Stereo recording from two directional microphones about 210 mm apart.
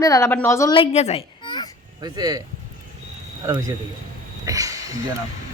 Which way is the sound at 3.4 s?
15° right (ahead or behind).